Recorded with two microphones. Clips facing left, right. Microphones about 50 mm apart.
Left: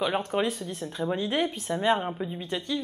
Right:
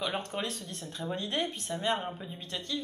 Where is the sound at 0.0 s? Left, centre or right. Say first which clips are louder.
Left 7 dB; centre.